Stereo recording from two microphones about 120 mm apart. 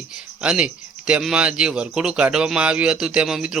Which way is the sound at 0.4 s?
10° right (ahead or behind).